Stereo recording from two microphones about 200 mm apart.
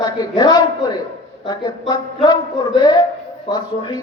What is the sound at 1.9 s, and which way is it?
Speech, 20° left (ahead or behind).